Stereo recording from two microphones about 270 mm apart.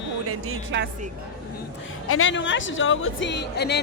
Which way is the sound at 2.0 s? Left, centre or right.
Left.